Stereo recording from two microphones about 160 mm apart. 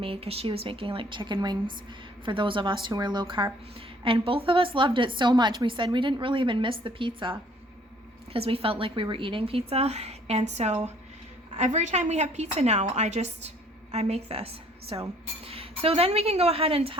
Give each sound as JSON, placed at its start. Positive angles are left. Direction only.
{"t": 0.0, "sound": "a woman's voice", "side_deg": -35}